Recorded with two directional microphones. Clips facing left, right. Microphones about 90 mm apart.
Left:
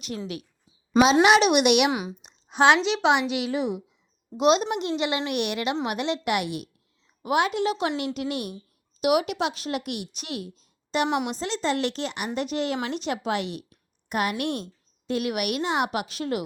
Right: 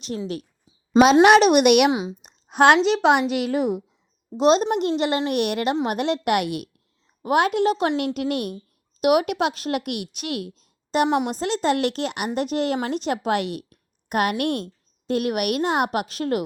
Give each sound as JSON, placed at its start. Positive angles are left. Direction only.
{"t": 1.2, "sound": "speech", "side_deg": -45}
{"t": 1.9, "sound": "speech", "side_deg": -20}
{"t": 2.2, "sound": "speech", "side_deg": -50}
{"t": 4.4, "sound": "speech", "side_deg": -35}
{"t": 15.0, "sound": "speech", "side_deg": -45}